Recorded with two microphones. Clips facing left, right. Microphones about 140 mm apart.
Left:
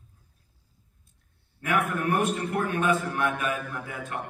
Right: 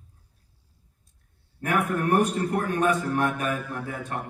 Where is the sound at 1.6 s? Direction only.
40° right (ahead or behind).